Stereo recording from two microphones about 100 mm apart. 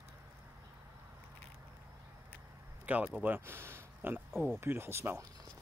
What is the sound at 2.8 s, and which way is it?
Speech, 15° right (ahead or behind).